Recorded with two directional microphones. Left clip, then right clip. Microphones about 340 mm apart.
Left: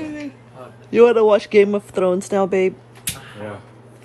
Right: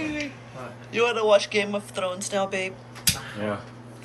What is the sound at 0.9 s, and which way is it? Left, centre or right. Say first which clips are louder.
Speech: left 8 dB; centre.